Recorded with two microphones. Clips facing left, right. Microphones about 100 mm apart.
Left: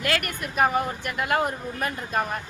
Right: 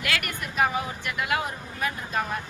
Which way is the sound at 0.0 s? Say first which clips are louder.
Left 3 dB; 45° left (ahead or behind).